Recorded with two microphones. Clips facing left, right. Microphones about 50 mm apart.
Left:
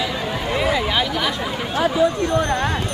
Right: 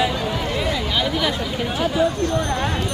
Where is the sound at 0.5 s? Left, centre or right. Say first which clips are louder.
Left 6 dB; centre.